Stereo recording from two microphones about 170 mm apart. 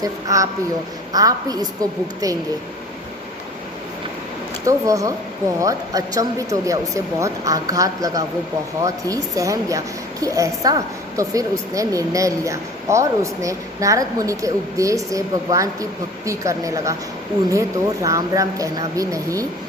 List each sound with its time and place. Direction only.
0.0 s a woman's voice: 20° right (ahead or behind)
4.6 s a woman's voice: 20° right (ahead or behind)